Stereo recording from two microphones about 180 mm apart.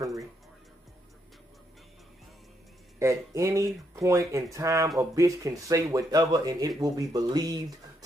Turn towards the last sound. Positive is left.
turn(degrees=-20)  # may be behind; listen again after turning